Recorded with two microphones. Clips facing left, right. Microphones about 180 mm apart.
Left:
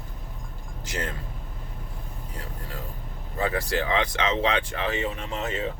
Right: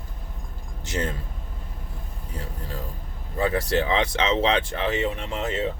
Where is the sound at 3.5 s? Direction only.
30° right (ahead or behind).